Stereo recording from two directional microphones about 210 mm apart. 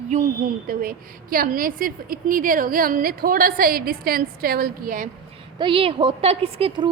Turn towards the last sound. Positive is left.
turn(degrees=-25)  # may be behind; listen again after turning